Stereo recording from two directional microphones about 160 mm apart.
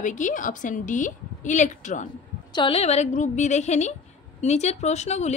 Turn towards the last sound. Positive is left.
turn(degrees=45)  # may be behind; listen again after turning